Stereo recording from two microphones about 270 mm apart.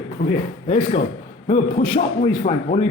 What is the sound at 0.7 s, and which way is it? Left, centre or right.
Speech, left.